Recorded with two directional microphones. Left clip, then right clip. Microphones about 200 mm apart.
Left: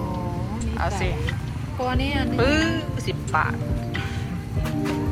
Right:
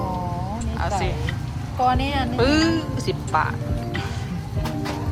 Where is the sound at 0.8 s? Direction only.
15° right (ahead or behind).